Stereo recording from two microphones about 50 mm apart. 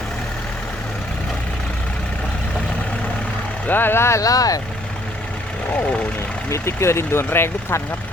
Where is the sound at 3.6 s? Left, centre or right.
Left.